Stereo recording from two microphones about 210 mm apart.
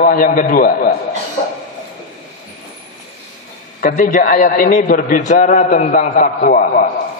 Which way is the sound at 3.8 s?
40° left (ahead or behind).